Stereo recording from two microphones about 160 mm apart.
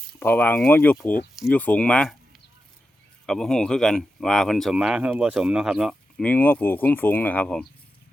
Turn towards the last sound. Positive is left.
turn(degrees=5)  # may be behind; listen again after turning